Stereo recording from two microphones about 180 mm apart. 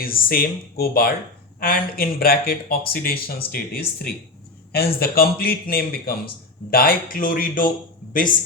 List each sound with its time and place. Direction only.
0.0 s speech: 55° left (ahead or behind)